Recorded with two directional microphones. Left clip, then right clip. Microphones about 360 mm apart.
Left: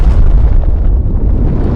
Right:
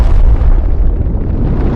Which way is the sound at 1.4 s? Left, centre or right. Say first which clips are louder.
Even; centre.